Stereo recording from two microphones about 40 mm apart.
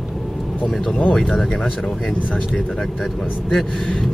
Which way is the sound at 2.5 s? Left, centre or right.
Centre.